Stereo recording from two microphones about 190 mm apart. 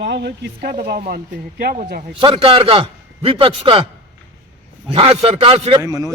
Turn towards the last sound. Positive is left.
turn(degrees=-20)  # may be behind; listen again after turning